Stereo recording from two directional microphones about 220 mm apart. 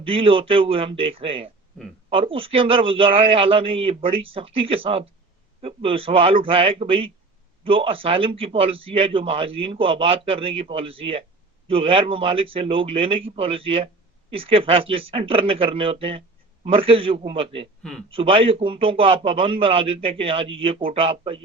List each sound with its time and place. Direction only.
0.0 s a man's voice: 25° right (ahead or behind)